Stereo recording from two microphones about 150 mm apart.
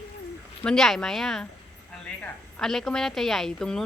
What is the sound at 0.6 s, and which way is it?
A woman's voice, 5° left (ahead or behind).